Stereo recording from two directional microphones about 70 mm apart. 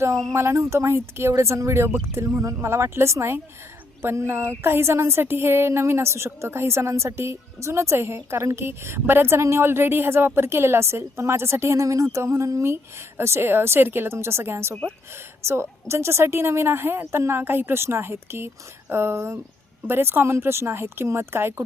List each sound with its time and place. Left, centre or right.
0.0 s speech: right
0.3 s a woman's voice: right